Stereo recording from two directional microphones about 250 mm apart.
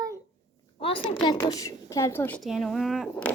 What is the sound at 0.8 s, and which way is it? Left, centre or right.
A woman's voice, left.